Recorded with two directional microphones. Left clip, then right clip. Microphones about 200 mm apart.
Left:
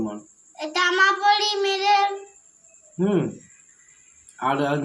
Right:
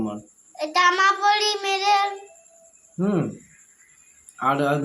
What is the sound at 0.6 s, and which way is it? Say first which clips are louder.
Speech: right 1 dB; 20° right (ahead or behind).